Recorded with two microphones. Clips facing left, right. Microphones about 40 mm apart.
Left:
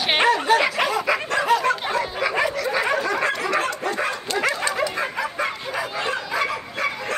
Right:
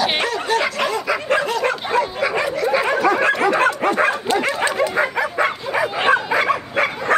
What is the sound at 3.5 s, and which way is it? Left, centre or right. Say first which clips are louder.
Bow-wow: right 6 dB; right.